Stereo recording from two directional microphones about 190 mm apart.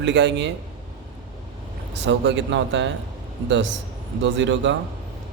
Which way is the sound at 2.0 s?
70° right (ahead or behind).